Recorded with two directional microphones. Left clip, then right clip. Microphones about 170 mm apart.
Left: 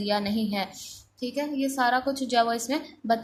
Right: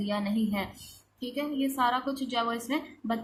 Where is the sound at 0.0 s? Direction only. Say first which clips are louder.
Left 4 dB; 35° left (ahead or behind).